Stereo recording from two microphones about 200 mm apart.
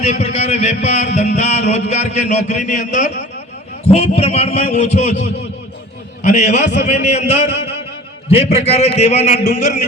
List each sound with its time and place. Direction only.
0.0 s a man's voice: 30° left (ahead or behind)